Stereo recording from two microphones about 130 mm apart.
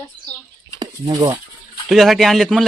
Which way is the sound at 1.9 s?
Centre (ahead or behind).